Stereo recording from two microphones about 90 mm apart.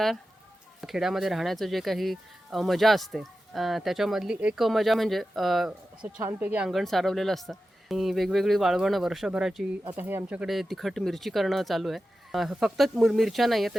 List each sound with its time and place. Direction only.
0.8 s speech: 5° right (ahead or behind)
6.2 s speech: 20° right (ahead or behind)
6.7 s speech: centre (ahead or behind)
9.9 s speech: 25° right (ahead or behind)
10.4 s speech: centre (ahead or behind)